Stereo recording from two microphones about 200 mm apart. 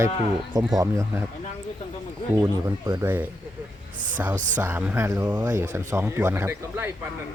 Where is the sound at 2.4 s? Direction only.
20° right (ahead or behind).